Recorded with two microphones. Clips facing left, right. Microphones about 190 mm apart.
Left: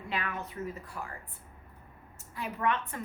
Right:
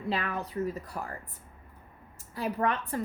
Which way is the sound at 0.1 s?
35° right (ahead or behind).